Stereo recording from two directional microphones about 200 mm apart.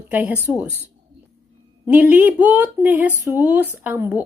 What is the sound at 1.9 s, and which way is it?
Speech, 10° right (ahead or behind).